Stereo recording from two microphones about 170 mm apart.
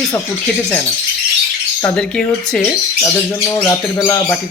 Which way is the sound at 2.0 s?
5° left (ahead or behind).